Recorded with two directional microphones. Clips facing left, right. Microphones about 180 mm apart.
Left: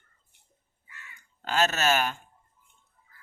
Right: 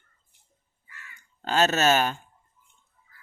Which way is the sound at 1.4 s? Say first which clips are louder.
Right 4 dB; 30° right (ahead or behind).